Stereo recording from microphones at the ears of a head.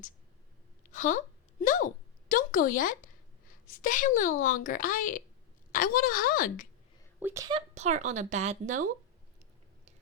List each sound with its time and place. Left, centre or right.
0.9 s a woman's voice: left
7.3 s speech: right